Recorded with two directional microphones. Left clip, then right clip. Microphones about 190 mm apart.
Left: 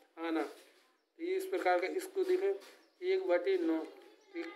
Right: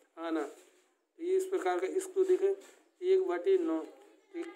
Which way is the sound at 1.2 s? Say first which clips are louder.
Right 2 dB; 30° right (ahead or behind).